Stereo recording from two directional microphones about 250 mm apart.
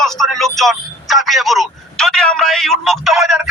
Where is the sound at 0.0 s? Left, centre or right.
Centre.